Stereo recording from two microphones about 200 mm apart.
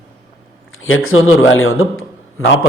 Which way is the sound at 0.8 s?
85° left.